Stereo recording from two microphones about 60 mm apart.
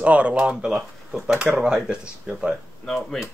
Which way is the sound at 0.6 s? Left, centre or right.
Centre.